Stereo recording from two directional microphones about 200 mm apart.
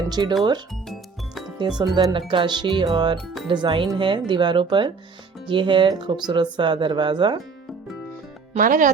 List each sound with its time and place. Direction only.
0.1 s speech: 20° right (ahead or behind)
1.5 s speech: 20° right (ahead or behind)
8.5 s speech: 40° right (ahead or behind)